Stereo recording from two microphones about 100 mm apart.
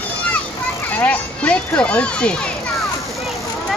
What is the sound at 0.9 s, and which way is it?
A child's voice, 15° left (ahead or behind).